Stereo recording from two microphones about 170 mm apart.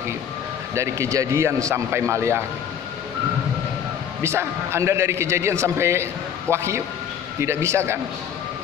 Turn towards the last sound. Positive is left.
turn(degrees=-15)  # may be behind; listen again after turning